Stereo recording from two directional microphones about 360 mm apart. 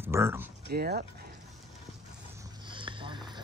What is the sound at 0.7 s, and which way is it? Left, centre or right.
Speech, right.